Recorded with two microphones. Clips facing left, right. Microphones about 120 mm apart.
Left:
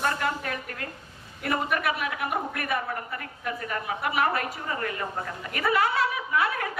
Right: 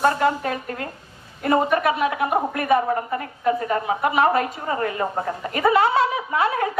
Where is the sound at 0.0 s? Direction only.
30° right (ahead or behind).